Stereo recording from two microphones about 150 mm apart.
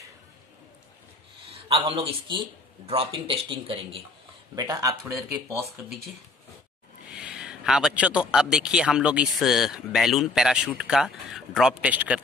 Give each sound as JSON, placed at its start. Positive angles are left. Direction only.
{"t": 1.5, "sound": "a man's voice", "side_deg": -40}
{"t": 4.6, "sound": "speech", "side_deg": -25}
{"t": 7.1, "sound": "a man's voice", "side_deg": -5}